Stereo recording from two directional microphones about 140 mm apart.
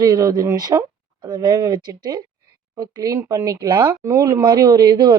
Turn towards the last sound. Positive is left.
turn(degrees=-30)  # may be behind; listen again after turning